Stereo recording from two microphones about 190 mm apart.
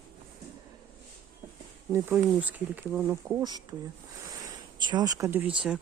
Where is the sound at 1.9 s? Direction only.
10° right (ahead or behind).